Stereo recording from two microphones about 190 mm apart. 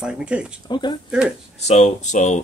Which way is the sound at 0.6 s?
25° left (ahead or behind).